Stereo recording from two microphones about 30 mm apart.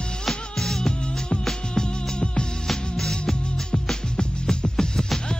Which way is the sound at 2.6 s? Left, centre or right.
Centre.